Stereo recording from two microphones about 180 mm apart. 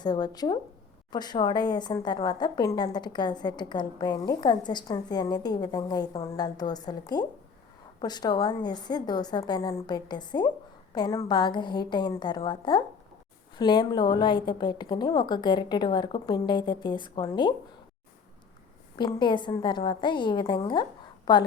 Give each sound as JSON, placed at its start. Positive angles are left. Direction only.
{"t": 0.0, "sound": "a woman's voice", "side_deg": 25}
{"t": 18.9, "sound": "a woman's voice", "side_deg": 25}